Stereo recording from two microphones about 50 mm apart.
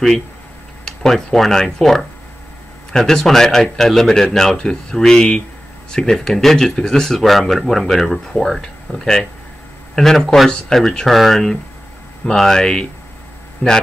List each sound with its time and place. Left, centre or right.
0.8 s speech: centre
13.6 s speech: left